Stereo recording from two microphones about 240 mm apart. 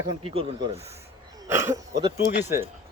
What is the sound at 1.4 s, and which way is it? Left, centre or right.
Speech, centre.